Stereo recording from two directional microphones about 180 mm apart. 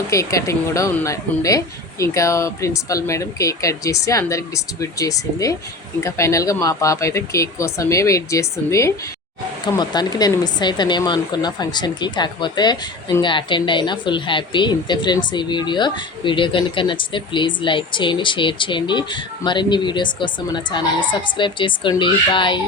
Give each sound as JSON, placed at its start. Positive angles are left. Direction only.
{"t": 0.1, "sound": "speech", "side_deg": 20}